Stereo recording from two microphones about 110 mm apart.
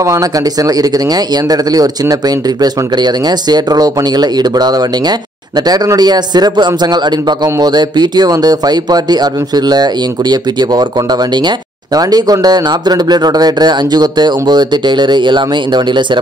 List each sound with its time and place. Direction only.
0.0 s speech: 30° right (ahead or behind)